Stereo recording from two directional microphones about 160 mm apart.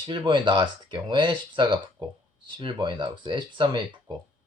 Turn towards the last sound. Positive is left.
turn(degrees=-30)  # may be behind; listen again after turning